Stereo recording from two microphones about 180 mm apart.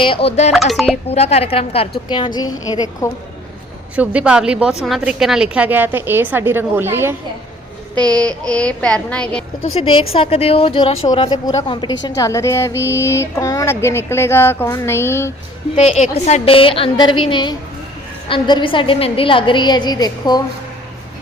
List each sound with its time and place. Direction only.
0.0 s a woman's voice: 30° left (ahead or behind)
0.5 s a sound: centre (ahead or behind)
1.1 s a woman's voice: 35° left (ahead or behind); by 3.1 s 20° left (ahead or behind)
3.9 s a woman's voice: 5° right (ahead or behind)
7.9 s child singing: 20° right (ahead or behind)
8.2 s a sound: 5° left (ahead or behind)
9.7 s a woman's voice: 35° left (ahead or behind)
12.0 s a sound: 20° left (ahead or behind)
15.7 s a woman's voice: 35° left (ahead or behind)